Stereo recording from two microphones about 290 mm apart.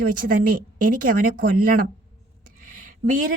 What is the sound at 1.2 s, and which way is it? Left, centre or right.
Speech, right.